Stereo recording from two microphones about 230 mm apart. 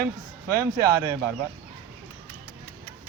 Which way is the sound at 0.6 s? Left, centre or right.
Centre.